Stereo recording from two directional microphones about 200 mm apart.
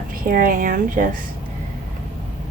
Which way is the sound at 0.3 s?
45° right (ahead or behind).